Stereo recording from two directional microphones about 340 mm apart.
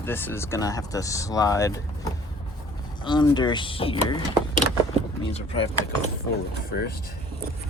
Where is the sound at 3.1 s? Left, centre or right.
Centre.